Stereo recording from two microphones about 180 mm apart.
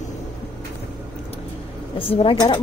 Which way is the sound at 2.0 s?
30° left (ahead or behind).